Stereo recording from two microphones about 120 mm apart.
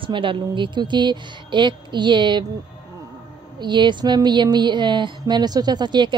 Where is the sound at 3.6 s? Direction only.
40° right (ahead or behind).